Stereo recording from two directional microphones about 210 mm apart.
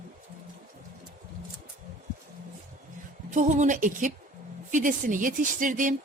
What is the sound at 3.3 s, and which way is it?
Speech, 35° right (ahead or behind).